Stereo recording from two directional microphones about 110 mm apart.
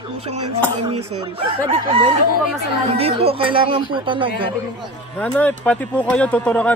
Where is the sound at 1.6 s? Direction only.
50° right (ahead or behind).